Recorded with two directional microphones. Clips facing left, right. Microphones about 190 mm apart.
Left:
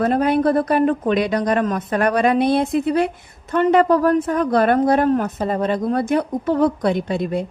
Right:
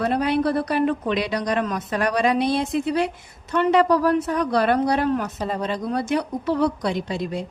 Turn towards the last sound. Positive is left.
turn(degrees=55)  # may be behind; listen again after turning